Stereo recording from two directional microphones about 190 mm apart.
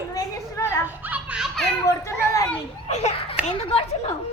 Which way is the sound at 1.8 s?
15° left (ahead or behind).